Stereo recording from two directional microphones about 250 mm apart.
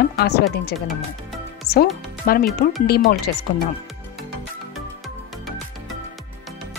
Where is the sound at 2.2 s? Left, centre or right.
Left.